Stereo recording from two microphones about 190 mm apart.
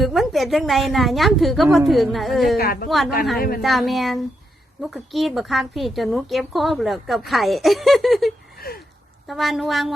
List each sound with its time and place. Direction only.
0.0 s a woman's voice: centre (ahead or behind)
2.6 s a woman's voice: 55° left (ahead or behind)
3.6 s a woman's voice: centre (ahead or behind)
8.5 s a sound: 50° left (ahead or behind)
9.2 s a woman's voice: centre (ahead or behind)